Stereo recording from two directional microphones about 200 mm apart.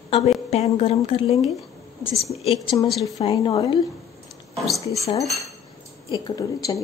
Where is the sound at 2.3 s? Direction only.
30° left (ahead or behind).